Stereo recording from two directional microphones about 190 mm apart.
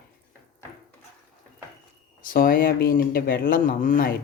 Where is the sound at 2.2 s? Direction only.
45° left (ahead or behind).